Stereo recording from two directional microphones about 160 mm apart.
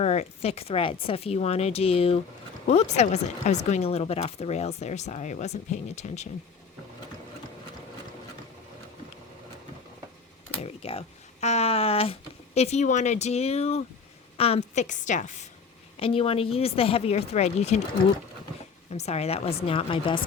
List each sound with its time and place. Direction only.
0.0 s speech: 40° left (ahead or behind)
10.6 s a sound: 40° left (ahead or behind)
12.5 s speech: 45° left (ahead or behind)
16.0 s speech: 35° left (ahead or behind)
18.9 s speech: 40° left (ahead or behind)